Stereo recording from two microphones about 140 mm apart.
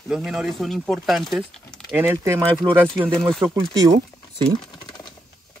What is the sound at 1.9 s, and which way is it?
Speech, 15° right (ahead or behind).